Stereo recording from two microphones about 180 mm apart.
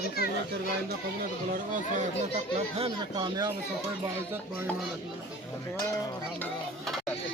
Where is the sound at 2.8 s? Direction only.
25° right (ahead or behind).